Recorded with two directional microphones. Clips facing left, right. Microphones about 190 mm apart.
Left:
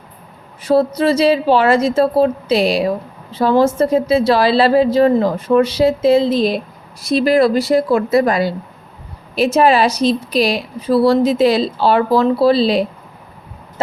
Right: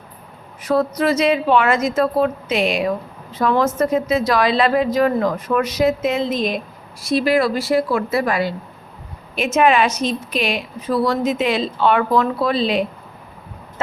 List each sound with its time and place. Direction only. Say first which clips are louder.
0.6 s a woman's voice: left 4 dB; 30° left (ahead or behind)
8.1 s a woman's voice: left 5 dB; 35° left (ahead or behind)